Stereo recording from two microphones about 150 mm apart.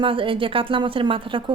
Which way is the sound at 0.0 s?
35° right (ahead or behind).